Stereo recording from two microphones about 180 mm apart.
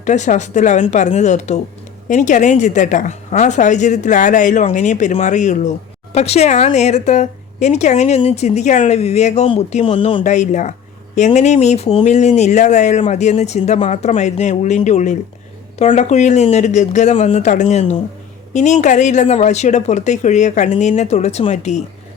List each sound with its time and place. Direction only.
0.0 s a woman's voice: 40° left (ahead or behind)
10.2 s a woman's voice: 40° left (ahead or behind)